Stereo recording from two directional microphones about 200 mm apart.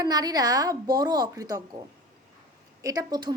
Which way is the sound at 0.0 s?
20° right (ahead or behind).